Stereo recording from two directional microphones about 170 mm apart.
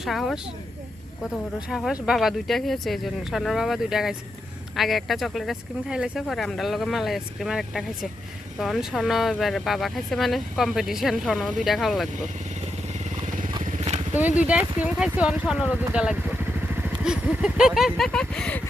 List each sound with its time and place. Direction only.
0.0 s speech: centre (ahead or behind)
1.7 s speech: 5° right (ahead or behind)
13.7 s vehicle: 40° right (ahead or behind)
14.1 s speech: 10° right (ahead or behind)